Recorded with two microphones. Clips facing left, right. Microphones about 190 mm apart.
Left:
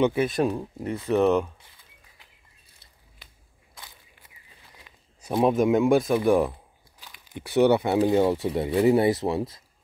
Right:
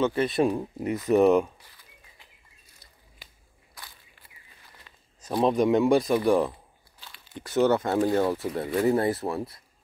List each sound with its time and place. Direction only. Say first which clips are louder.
0.0 s speech: left 1 dB; 5° left (ahead or behind)
3.7 s walk: even; 20° left (ahead or behind)
4.7 s a sound: left 2 dB; 10° left (ahead or behind)
5.4 s speech: left 1 dB; 5° left (ahead or behind); by 9.5 s 20° left (ahead or behind)